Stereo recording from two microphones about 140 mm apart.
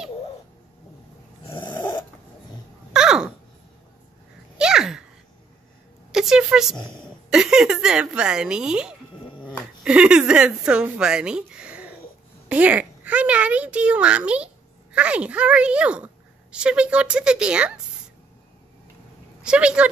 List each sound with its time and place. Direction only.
1.5 s snoring: 15° left (ahead or behind)
2.9 s babbling: 5° right (ahead or behind)
4.6 s sneeze: 5° right (ahead or behind)
6.1 s a woman's voice: 5° right (ahead or behind)
19.4 s speech: 5° right (ahead or behind)